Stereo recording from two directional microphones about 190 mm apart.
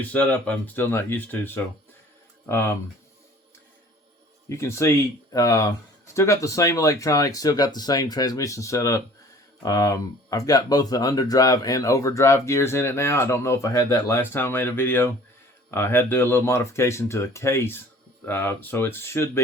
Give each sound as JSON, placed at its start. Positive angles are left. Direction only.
{"t": 0.1, "sound": "speech", "side_deg": 5}
{"t": 4.4, "sound": "speech", "side_deg": 15}